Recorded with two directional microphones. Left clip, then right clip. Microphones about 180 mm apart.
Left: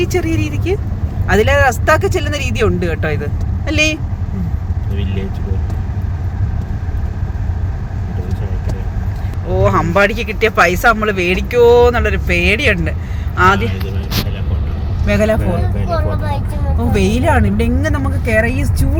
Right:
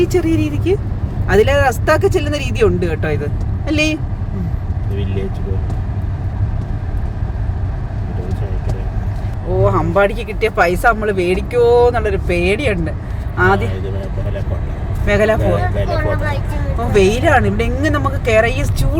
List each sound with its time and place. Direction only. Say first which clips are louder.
0.0 s speech: right 2 dB; 20° right (ahead or behind)
9.6 s a man's voice: left 1 dB; 5° right (ahead or behind)
15.0 s speech: right 1 dB; centre (ahead or behind)
16.9 s speech: right 3 dB; 5° left (ahead or behind)